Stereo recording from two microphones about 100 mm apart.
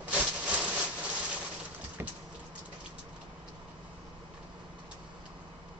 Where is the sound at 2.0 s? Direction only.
25° right (ahead or behind).